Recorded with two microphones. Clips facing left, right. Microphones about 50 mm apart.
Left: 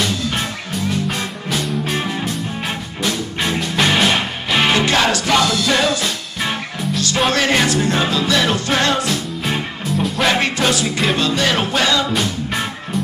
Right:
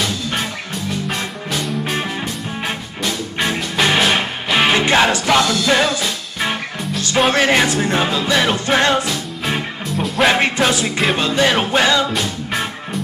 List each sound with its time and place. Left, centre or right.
0.0 s music: centre
4.7 s music: centre
7.2 s music: centre
9.0 s music: centre
10.2 s music: centre
12.1 s music: centre